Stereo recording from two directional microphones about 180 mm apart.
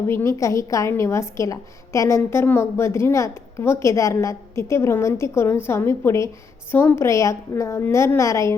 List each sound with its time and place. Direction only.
0.1 s a woman's voice: 15° left (ahead or behind)